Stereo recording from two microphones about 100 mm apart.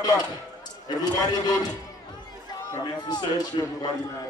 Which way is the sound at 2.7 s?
40° left (ahead or behind).